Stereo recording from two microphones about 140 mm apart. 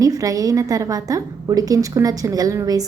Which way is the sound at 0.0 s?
25° right (ahead or behind).